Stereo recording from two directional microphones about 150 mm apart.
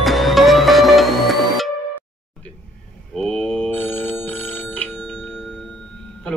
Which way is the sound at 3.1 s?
5° left (ahead or behind).